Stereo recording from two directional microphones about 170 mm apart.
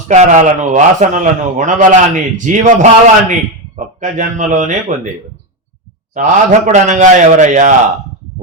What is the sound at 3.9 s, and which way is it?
Speech, 50° right (ahead or behind).